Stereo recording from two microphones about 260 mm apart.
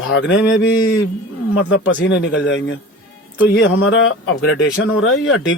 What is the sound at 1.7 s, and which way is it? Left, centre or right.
A man's voice, left.